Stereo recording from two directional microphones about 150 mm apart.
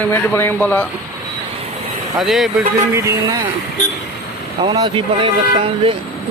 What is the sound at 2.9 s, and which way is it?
Speech, 20° right (ahead or behind).